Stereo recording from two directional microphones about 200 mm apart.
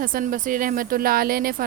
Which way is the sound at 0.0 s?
45° right (ahead or behind).